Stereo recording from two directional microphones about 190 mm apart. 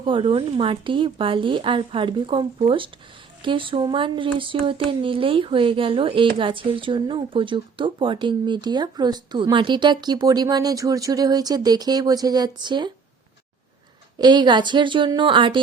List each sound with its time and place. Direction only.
0.0 s speech: 25° right (ahead or behind)
14.2 s speech: 25° right (ahead or behind)